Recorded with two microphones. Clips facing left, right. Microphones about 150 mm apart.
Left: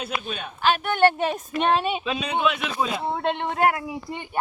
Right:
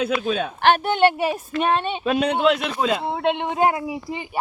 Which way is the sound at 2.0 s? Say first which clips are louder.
Right 6 dB; 60° right (ahead or behind).